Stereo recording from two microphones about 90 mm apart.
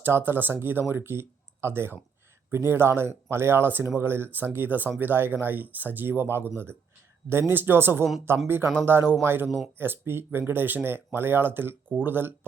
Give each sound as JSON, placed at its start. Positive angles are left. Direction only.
{"t": 0.0, "sound": "speech", "side_deg": -25}